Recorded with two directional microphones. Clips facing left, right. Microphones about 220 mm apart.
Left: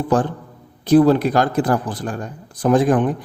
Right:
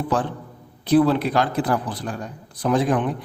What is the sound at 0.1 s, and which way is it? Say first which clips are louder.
A man's voice: left 8 dB; 45° left (ahead or behind).